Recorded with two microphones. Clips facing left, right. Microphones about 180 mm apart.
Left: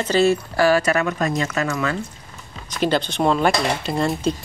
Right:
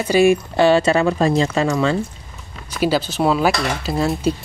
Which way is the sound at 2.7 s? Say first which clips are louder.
Right 2 dB; 5° right (ahead or behind).